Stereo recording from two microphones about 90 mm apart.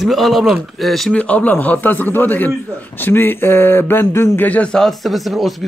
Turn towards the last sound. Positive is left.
turn(degrees=0)  # may be behind; listen again after turning